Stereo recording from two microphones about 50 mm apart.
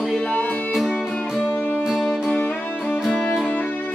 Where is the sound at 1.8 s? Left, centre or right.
Centre.